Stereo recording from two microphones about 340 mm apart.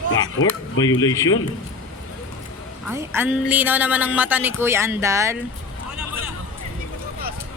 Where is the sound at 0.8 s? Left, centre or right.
Centre.